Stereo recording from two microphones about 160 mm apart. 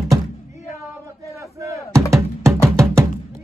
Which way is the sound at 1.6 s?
20° right (ahead or behind).